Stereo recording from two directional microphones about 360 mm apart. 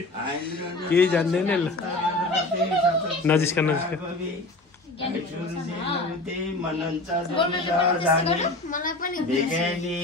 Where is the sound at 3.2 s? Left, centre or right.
Centre.